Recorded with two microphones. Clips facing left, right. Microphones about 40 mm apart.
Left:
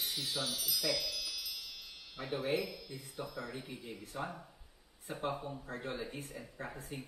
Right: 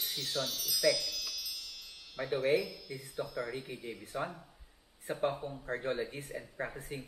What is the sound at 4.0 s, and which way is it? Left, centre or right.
Speech, right.